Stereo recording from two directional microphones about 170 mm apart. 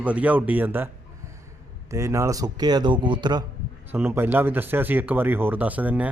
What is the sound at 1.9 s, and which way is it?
A man's voice, 15° right (ahead or behind).